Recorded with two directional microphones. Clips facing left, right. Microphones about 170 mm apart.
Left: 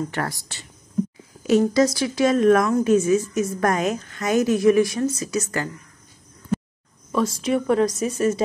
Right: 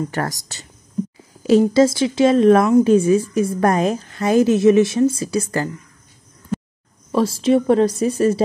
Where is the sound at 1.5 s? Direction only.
30° right (ahead or behind).